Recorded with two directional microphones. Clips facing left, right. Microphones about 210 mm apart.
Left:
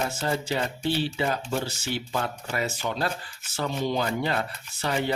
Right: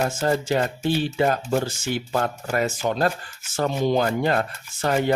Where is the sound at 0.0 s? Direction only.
50° right (ahead or behind).